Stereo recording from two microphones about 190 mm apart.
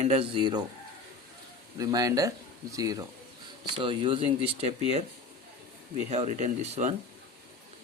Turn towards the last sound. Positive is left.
turn(degrees=-35)  # may be behind; listen again after turning